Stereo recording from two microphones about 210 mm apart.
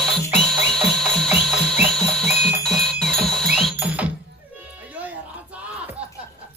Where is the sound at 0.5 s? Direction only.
Centre (ahead or behind).